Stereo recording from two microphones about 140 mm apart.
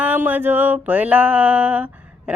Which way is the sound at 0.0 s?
10° right (ahead or behind).